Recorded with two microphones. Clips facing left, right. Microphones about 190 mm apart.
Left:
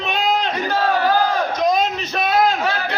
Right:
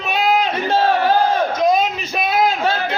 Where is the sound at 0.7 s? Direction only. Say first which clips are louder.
Right 4 dB; 25° right (ahead or behind).